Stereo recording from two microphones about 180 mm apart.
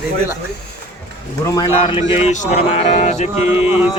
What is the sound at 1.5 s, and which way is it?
Speech, 25° left (ahead or behind).